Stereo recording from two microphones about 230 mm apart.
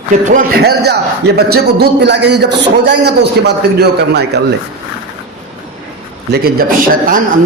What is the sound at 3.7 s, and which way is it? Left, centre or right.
Speech, right.